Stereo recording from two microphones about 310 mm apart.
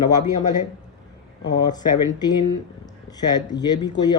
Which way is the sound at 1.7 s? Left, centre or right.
Centre.